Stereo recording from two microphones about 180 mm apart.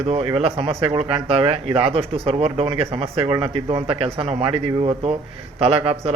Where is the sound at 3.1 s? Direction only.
15° right (ahead or behind).